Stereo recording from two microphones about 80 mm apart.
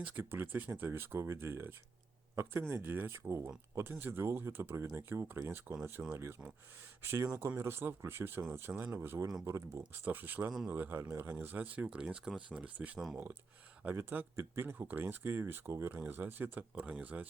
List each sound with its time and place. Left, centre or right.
0.0 s speech: right
3.1 s speech: right
10.1 s speech: right
13.9 s speech: right